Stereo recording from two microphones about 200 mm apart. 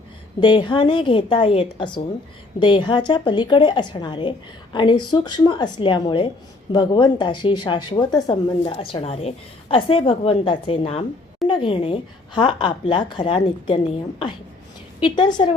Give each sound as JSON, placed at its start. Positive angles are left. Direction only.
{"t": 0.3, "sound": "speech", "side_deg": 25}
{"t": 15.0, "sound": "speech", "side_deg": 25}